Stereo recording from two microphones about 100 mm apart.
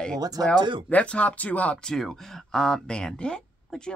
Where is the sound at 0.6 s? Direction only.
50° right (ahead or behind).